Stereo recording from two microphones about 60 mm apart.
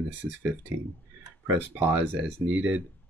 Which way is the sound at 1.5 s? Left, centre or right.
Right.